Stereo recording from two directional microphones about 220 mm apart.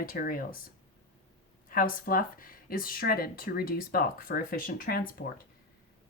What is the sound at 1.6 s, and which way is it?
Speech, 40° left (ahead or behind).